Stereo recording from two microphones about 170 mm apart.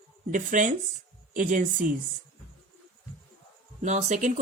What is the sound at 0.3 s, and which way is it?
Speech, 50° right (ahead or behind).